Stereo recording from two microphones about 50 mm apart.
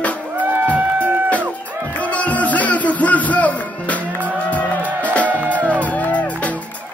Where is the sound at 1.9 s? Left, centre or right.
Left.